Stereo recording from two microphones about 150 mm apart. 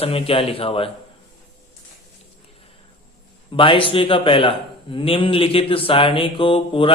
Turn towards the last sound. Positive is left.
turn(degrees=35)  # may be behind; listen again after turning